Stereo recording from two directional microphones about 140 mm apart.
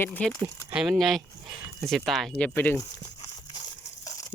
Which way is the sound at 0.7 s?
5° right (ahead or behind).